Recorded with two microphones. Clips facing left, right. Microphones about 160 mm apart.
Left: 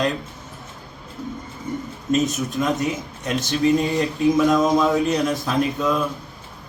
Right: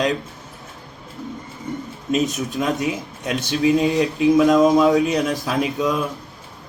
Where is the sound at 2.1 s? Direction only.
10° right (ahead or behind).